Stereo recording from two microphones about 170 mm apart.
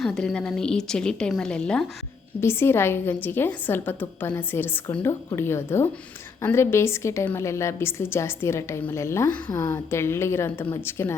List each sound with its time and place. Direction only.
0.0 s a woman's voice: centre (ahead or behind)